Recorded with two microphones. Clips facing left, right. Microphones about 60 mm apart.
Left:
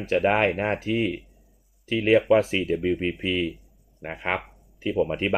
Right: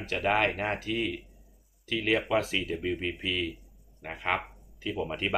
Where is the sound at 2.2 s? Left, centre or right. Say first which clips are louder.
Left 8 dB; left.